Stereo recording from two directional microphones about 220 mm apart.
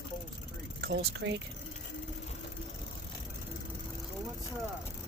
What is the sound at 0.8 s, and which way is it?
Speech, 50° right (ahead or behind).